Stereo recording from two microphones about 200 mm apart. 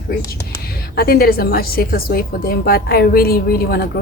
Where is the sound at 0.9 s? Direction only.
50° left (ahead or behind).